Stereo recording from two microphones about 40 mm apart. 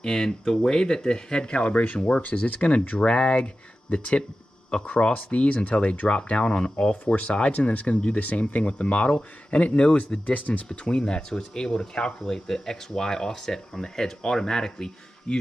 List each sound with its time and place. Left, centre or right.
0.0 s speech: centre; by 2.0 s left
2.0 s speech: left
2.2 s speech: left
10.7 s speech: left